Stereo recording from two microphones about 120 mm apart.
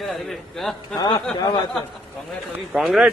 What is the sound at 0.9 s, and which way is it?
Speech, 40° left (ahead or behind).